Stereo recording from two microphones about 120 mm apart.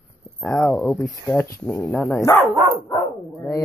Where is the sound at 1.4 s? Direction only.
20° left (ahead or behind).